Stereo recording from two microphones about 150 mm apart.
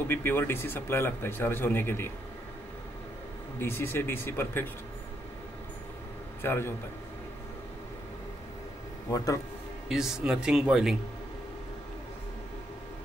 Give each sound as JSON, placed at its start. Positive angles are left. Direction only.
{"t": 0.1, "sound": "speech", "side_deg": 15}
{"t": 3.5, "sound": "speech", "side_deg": 15}
{"t": 6.4, "sound": "speech", "side_deg": 15}
{"t": 9.1, "sound": "a man's voice", "side_deg": 20}
{"t": 9.8, "sound": "speech", "side_deg": -5}